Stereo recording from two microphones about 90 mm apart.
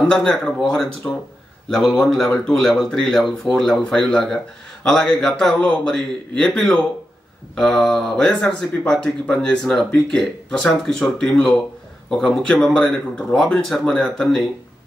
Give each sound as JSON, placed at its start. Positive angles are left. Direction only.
{"t": 0.0, "sound": "speech", "side_deg": 5}
{"t": 1.0, "sound": "speech", "side_deg": 25}
{"t": 1.7, "sound": "speech", "side_deg": 10}